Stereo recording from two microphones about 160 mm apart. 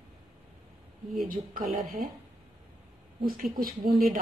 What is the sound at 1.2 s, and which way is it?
Speech, 60° right (ahead or behind).